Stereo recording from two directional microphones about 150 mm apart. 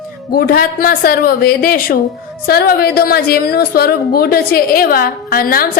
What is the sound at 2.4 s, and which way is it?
A woman's voice, 90° left.